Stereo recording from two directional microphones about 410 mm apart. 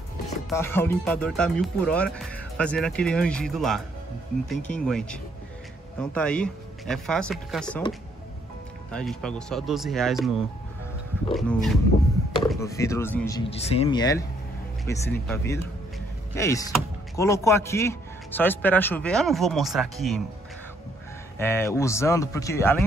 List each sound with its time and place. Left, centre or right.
0.5 s speech: centre
4.8 s speech: centre
8.9 s speech: centre
11.3 s speech: centre
21.4 s speech: centre